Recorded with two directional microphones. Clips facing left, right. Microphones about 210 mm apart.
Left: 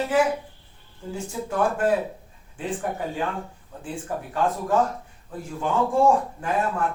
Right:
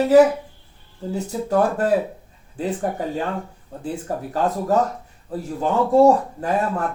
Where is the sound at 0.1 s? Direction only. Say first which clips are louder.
Right 10 dB; 40° right (ahead or behind).